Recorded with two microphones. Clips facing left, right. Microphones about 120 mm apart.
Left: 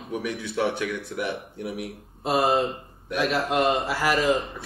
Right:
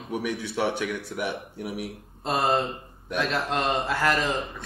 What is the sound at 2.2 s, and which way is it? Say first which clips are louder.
Mantra: left 2 dB; 5° left (ahead or behind).